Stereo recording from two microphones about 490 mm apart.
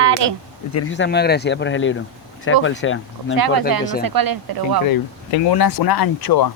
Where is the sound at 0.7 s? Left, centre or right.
Left.